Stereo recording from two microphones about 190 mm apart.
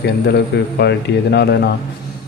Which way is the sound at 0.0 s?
60° left (ahead or behind).